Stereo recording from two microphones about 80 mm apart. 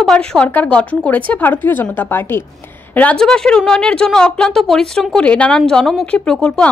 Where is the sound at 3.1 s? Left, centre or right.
Centre.